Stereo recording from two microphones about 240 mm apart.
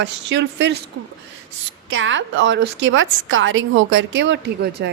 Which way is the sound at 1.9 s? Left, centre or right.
Right.